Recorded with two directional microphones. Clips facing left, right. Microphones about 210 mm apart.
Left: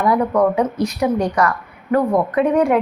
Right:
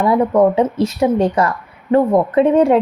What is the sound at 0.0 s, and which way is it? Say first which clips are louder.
A woman's voice: right 3 dB; 30° right (ahead or behind).